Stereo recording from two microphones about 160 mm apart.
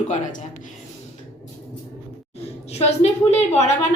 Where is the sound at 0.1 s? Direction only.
55° left (ahead or behind).